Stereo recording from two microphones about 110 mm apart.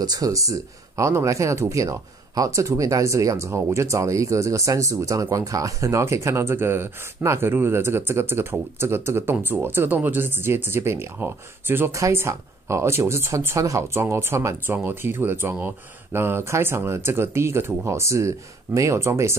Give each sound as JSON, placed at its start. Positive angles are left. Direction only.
{"t": 0.0, "sound": "speech", "side_deg": -35}